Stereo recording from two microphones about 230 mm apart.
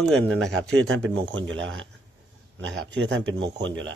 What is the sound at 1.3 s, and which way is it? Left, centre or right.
Speech, right.